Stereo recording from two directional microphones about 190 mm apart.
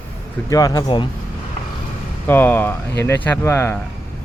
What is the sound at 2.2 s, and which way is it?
Speech, 10° left (ahead or behind).